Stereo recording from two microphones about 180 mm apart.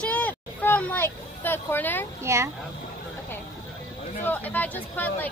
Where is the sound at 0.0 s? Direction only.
10° left (ahead or behind).